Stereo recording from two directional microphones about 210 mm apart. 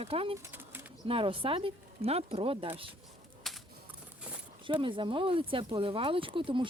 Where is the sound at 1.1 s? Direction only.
25° right (ahead or behind).